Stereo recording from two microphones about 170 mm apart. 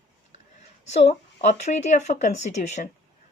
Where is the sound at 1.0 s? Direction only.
40° left (ahead or behind).